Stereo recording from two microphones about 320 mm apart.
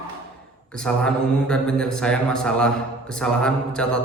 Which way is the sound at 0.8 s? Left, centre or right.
Centre.